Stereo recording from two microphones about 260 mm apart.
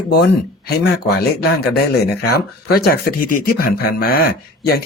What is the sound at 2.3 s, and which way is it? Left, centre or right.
Speech, left.